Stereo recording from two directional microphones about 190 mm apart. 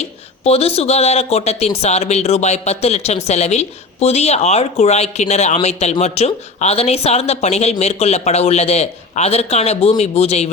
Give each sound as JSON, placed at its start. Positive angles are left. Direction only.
{"t": 0.0, "sound": "speech", "side_deg": 35}